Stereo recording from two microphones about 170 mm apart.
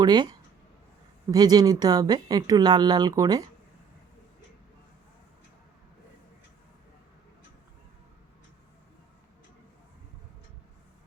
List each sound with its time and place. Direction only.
0.0 s speech: 25° right (ahead or behind)